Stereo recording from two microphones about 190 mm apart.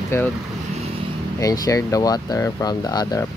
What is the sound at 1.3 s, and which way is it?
Speech, 20° left (ahead or behind).